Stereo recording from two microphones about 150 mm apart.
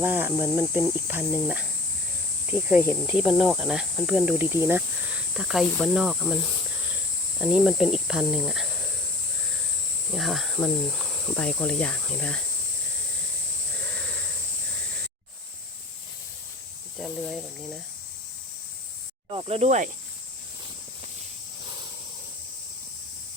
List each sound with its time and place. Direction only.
0.0 s cricket: 15° right (ahead or behind)
10.2 s cricket: centre (ahead or behind)
11.3 s speech: 10° left (ahead or behind)
17.0 s cricket: 5° left (ahead or behind)
19.3 s snake: 40° right (ahead or behind)